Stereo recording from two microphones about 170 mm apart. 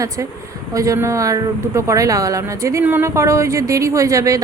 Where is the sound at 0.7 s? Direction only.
20° right (ahead or behind).